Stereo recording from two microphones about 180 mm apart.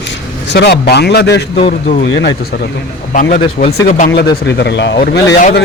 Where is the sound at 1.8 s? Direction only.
50° left (ahead or behind).